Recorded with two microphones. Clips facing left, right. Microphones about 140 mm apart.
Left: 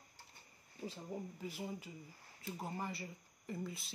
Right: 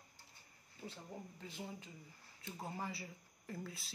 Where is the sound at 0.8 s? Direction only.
10° left (ahead or behind).